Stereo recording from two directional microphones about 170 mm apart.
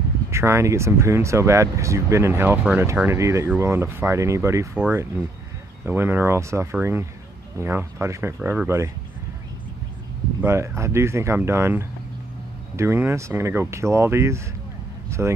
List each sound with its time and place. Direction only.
0.3 s speech: 15° right (ahead or behind)
10.4 s speech: 15° right (ahead or behind)